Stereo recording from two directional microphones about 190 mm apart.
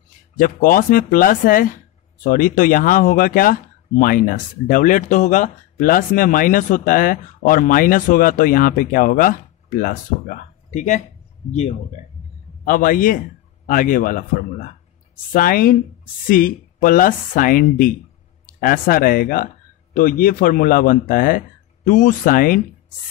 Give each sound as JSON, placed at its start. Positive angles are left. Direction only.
{"t": 0.4, "sound": "speech", "side_deg": 45}
{"t": 12.6, "sound": "speech", "side_deg": 45}